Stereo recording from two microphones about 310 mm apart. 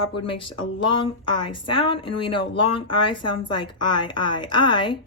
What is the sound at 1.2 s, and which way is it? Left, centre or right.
A woman's voice, centre.